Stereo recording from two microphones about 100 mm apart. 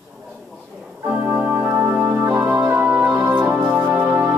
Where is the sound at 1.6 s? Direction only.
25° right (ahead or behind).